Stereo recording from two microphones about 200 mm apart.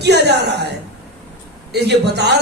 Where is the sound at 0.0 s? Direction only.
55° right (ahead or behind).